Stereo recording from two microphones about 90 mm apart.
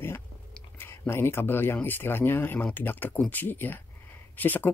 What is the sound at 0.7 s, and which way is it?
Speech, 25° left (ahead or behind).